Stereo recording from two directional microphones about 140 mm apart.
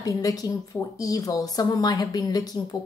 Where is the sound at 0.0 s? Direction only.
25° left (ahead or behind).